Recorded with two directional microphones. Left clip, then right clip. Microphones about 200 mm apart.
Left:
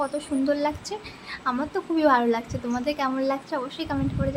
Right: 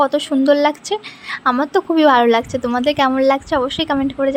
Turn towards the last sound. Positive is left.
turn(degrees=-35)  # may be behind; listen again after turning